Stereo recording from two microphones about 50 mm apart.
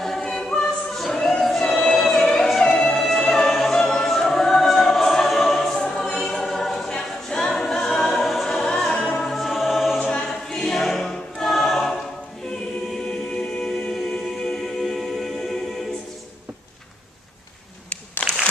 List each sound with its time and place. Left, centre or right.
0.0 s choir: centre
3.0 s music: centre
6.9 s choir: centre
9.9 s choir: centre
13.1 s music: left
14.8 s music: centre